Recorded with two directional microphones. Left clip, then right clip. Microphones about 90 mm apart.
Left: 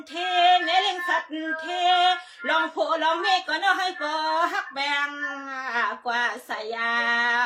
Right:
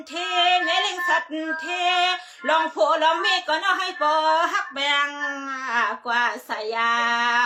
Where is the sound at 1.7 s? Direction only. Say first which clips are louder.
Left 1 dB; 30° right (ahead or behind).